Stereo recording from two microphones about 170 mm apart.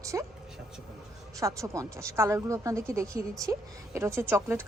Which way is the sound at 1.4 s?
20° right (ahead or behind).